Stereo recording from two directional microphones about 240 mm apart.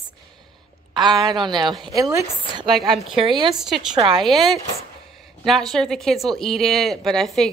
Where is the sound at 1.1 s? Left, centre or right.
Centre.